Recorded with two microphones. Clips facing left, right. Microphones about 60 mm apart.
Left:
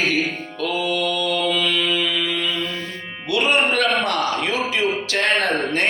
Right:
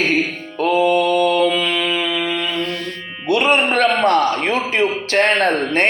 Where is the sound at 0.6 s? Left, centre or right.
Right.